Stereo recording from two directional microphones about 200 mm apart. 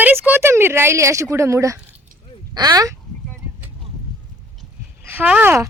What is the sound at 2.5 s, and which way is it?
Speech, 20° right (ahead or behind).